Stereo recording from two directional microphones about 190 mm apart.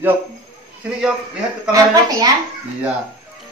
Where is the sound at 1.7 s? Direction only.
20° right (ahead or behind).